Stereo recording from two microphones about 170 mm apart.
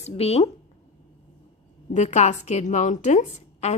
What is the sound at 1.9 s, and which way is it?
A woman's voice, 40° left (ahead or behind).